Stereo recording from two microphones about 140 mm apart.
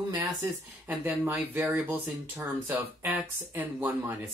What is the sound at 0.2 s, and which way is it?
Speech, 15° right (ahead or behind).